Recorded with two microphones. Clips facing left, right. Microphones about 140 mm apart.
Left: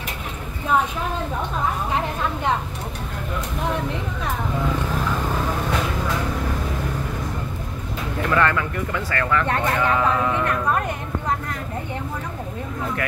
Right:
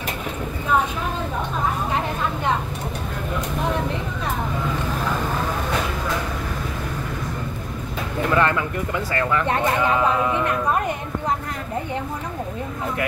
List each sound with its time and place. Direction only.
8.3 s speech: 20° right (ahead or behind)